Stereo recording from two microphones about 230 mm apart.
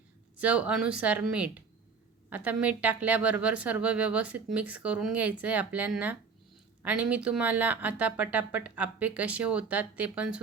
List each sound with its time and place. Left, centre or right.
0.3 s a woman's voice: centre